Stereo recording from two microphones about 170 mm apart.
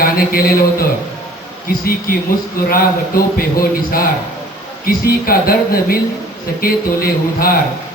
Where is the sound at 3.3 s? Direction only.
60° left (ahead or behind).